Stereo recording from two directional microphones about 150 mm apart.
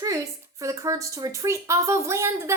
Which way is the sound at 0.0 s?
20° right (ahead or behind).